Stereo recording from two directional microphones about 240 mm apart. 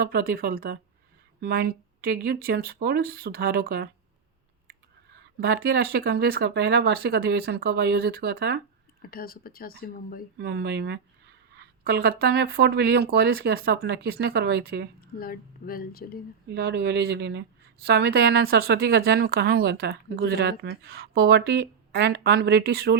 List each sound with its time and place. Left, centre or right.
0.0 s speech: right
5.4 s speech: right
9.0 s speech: left
10.3 s speech: right
15.2 s speech: left
16.5 s speech: right